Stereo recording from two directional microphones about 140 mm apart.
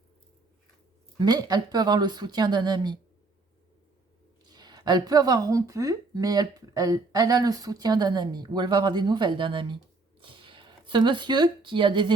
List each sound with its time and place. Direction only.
1.2 s speech: 30° right (ahead or behind)
4.4 s speech: 30° right (ahead or behind)